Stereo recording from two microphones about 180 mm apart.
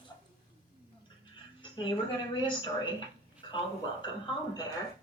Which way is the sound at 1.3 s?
30° left (ahead or behind).